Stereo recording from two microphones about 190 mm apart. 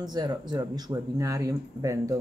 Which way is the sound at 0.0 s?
20° right (ahead or behind).